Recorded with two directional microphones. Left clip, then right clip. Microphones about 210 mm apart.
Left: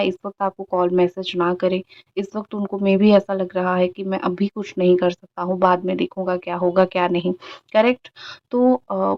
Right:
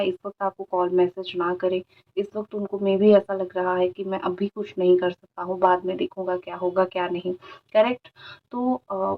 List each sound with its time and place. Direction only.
0.0 s speech: 40° left (ahead or behind)